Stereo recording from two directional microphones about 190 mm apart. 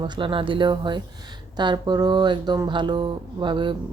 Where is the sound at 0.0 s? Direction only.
25° right (ahead or behind).